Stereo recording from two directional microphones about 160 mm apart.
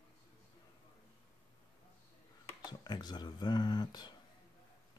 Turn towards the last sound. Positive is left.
turn(degrees=25)  # may be behind; listen again after turning